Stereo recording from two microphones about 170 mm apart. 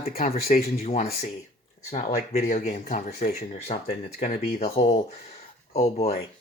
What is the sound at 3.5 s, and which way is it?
Speech, 40° left (ahead or behind).